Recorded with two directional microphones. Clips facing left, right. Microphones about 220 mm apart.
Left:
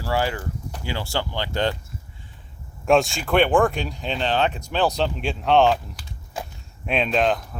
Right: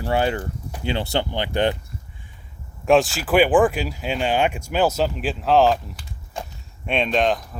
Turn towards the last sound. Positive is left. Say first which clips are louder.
# right 1 dB
turn(degrees=0)  # may be behind; listen again after turning